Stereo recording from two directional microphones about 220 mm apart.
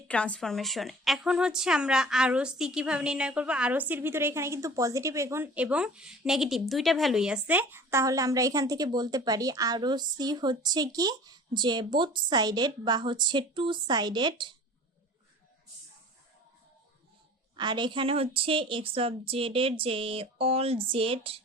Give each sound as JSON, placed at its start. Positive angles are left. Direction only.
{"t": 0.1, "sound": "a woman's voice", "side_deg": 5}
{"t": 17.6, "sound": "a woman's voice", "side_deg": -20}